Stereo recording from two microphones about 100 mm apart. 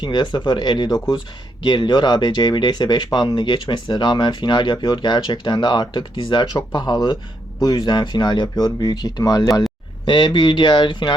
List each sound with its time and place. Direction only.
0.0 s speech: 50° left (ahead or behind)
10.1 s speech: 50° left (ahead or behind)